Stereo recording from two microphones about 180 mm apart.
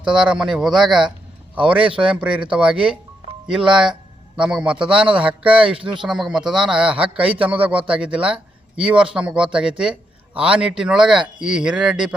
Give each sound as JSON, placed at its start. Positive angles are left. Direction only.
{"t": 0.0, "sound": "a man's voice", "side_deg": -5}